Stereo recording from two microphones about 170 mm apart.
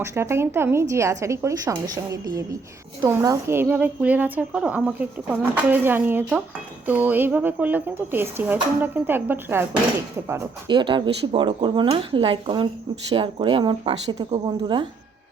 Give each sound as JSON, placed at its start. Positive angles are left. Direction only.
{"t": 0.0, "sound": "a woman's voice", "side_deg": -15}
{"t": 10.7, "sound": "speech", "side_deg": -30}